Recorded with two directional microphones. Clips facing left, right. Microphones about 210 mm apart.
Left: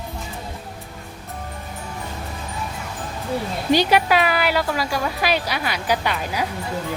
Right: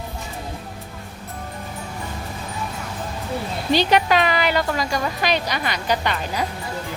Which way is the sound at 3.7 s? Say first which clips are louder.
Even; 10° left (ahead or behind).